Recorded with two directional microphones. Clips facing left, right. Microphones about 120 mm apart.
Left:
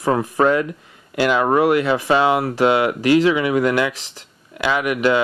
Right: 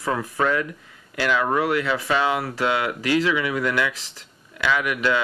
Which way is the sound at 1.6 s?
20° left (ahead or behind).